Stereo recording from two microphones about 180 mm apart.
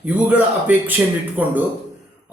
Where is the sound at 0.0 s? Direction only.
10° right (ahead or behind).